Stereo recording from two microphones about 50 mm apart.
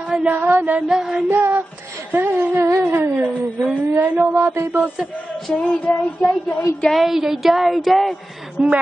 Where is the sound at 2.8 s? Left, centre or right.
Right.